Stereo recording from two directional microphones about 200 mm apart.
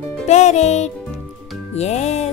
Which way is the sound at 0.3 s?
35° left (ahead or behind).